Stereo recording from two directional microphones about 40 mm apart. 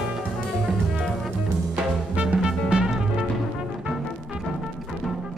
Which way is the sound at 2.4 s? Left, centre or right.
Centre.